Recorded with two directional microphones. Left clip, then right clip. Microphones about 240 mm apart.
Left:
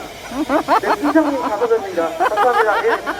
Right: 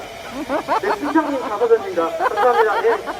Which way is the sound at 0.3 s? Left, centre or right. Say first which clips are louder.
Left 5 dB; centre.